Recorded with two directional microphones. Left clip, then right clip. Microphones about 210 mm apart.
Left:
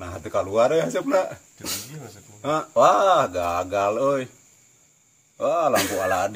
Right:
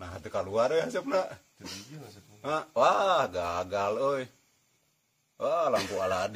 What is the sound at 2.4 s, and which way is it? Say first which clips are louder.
Speech: left 8 dB; 20° right (ahead or behind).